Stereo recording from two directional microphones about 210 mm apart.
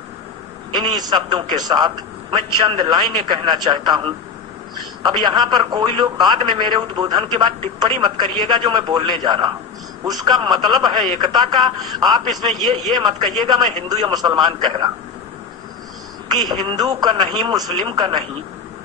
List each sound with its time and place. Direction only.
0.9 s a man's voice: 20° right (ahead or behind)
16.3 s a man's voice: 20° right (ahead or behind)